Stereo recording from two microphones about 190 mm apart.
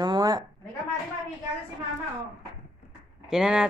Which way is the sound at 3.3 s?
5° right (ahead or behind).